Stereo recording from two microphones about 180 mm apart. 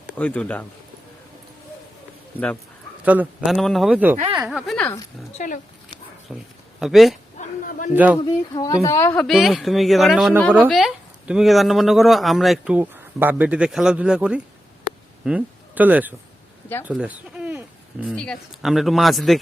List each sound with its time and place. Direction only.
0.2 s a woman's voice: 5° left (ahead or behind)
3.0 s speech: 10° right (ahead or behind)
5.4 s speech: 45° left (ahead or behind)
6.3 s a woman's voice: 5° left (ahead or behind)
7.3 s a sound: 50° left (ahead or behind)
7.9 s speech: 10° right (ahead or behind)
8.5 s a woman's voice: 20° left (ahead or behind)
9.1 s speech: centre (ahead or behind)
18.1 s speech: 5° left (ahead or behind)